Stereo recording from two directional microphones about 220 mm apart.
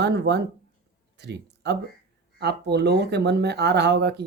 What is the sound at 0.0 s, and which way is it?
Speech, 50° right (ahead or behind).